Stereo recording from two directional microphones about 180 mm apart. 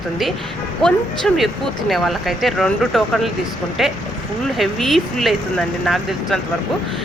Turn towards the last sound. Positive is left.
turn(degrees=0)  # may be behind; listen again after turning